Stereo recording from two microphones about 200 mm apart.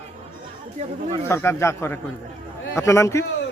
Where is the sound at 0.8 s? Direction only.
30° right (ahead or behind).